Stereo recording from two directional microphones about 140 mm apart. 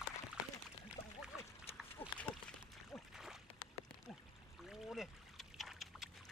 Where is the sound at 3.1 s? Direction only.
Centre (ahead or behind).